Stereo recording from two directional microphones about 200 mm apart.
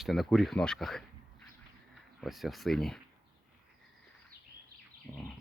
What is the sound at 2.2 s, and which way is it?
Speech, centre (ahead or behind).